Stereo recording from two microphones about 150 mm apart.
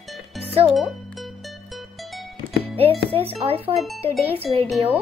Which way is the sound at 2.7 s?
40° right (ahead or behind).